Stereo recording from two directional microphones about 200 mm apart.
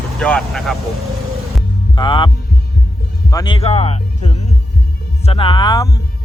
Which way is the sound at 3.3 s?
20° left (ahead or behind).